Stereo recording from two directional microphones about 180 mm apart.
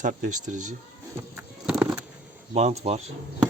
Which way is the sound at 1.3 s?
10° right (ahead or behind).